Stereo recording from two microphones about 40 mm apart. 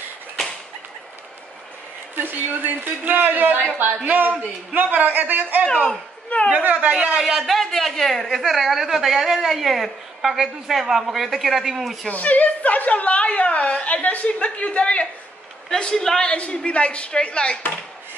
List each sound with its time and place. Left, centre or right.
2.1 s speech: right
4.1 s speech: right
5.7 s a man's voice: centre
6.5 s a woman's voice: right
7.2 s a woman's voice: centre
12.1 s a woman's voice: left
15.7 s a man's voice: centre
16.3 s a woman's voice: left